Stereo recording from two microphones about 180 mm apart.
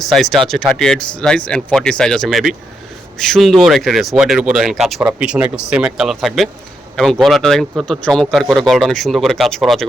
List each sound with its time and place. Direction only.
0.0 s speech: centre (ahead or behind)